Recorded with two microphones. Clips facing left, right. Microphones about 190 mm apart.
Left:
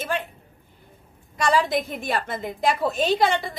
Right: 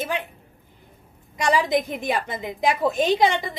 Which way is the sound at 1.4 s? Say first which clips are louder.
Right 1 dB; 15° right (ahead or behind).